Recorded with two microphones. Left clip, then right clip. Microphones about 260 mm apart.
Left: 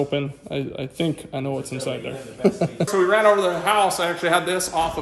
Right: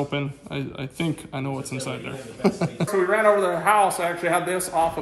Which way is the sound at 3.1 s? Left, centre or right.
Centre.